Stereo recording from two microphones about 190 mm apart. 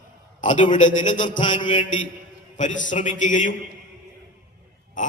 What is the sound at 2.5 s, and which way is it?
A man's voice, 40° left (ahead or behind).